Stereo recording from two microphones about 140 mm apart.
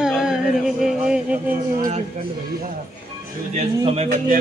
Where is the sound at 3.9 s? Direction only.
50° right (ahead or behind).